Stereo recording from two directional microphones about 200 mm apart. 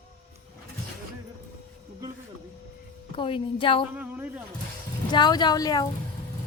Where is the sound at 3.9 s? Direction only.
10° right (ahead or behind).